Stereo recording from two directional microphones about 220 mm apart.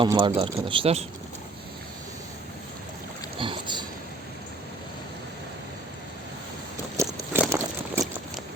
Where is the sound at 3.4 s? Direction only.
20° right (ahead or behind).